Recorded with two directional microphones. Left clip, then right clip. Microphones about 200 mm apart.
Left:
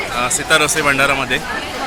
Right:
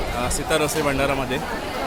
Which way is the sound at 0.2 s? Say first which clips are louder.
Left 8 dB; 15° right (ahead or behind).